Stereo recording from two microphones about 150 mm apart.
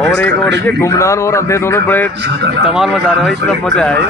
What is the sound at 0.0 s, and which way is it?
A man's voice, 5° left (ahead or behind).